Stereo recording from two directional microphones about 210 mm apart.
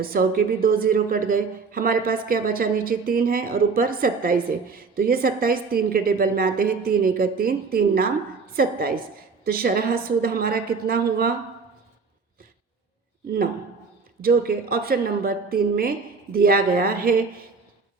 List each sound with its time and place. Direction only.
0.0 s speech: 45° right (ahead or behind)
14.2 s speech: 45° right (ahead or behind)